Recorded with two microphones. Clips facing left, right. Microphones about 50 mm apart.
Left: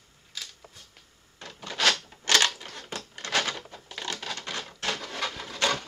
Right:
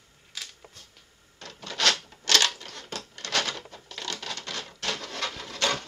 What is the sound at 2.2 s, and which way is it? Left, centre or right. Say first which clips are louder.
Typewriter: left 1 dB; centre.